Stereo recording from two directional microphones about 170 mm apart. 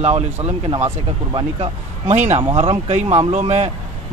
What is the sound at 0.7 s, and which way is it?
Speech, 30° right (ahead or behind).